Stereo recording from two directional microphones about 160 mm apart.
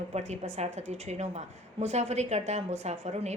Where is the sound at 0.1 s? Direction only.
45° right (ahead or behind).